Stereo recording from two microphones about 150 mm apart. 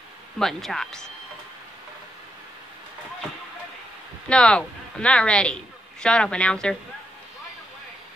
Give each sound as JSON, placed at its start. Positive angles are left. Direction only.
{"t": 0.4, "sound": "speech", "side_deg": 0}
{"t": 4.3, "sound": "a woman's voice", "side_deg": 5}